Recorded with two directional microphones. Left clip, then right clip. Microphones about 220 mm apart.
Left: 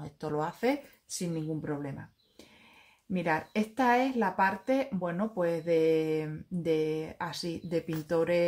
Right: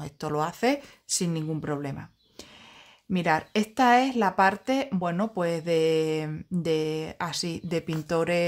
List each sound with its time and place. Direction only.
0.0 s speech: 40° right (ahead or behind)